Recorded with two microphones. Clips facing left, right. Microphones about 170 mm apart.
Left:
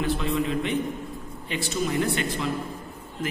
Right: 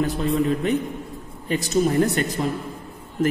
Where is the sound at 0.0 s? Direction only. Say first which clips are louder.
Right 4 dB; 40° right (ahead or behind).